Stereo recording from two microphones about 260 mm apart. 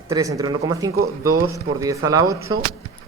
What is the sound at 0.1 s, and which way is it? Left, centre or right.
Speech, centre.